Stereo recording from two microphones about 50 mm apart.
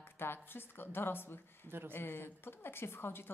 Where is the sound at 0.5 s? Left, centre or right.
Left.